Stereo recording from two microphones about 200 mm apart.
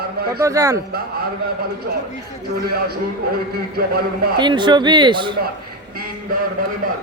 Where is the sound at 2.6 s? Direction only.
50° right (ahead or behind).